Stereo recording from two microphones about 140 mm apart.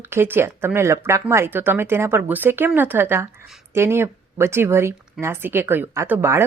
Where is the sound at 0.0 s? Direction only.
15° right (ahead or behind).